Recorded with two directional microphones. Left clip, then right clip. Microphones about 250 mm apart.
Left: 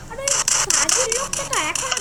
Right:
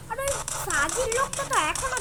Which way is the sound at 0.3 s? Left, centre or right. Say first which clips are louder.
Left 12 dB; left.